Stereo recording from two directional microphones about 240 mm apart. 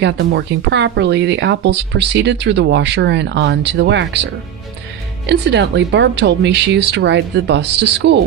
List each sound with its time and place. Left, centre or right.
0.0 s speech: right
5.2 s speech: right